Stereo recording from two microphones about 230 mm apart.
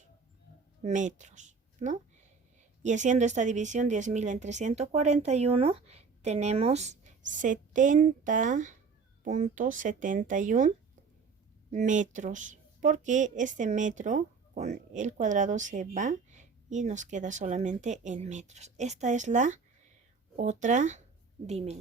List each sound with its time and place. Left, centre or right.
0.8 s speech: right
11.7 s a woman's voice: right